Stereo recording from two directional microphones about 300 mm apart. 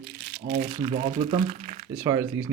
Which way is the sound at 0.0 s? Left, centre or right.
Right.